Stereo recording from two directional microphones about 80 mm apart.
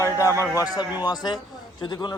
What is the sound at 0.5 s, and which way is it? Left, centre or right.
Speech, left.